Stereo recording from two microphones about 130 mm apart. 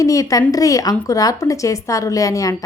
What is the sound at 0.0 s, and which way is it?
Speech, 25° left (ahead or behind).